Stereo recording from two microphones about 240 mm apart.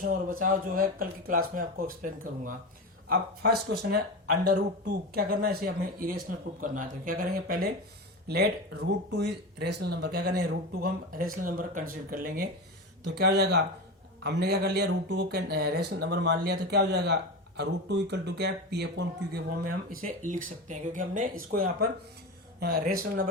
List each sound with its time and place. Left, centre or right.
0.3 s speech: right